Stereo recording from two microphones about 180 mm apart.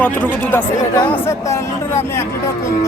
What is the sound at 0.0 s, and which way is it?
Speech, 10° left (ahead or behind).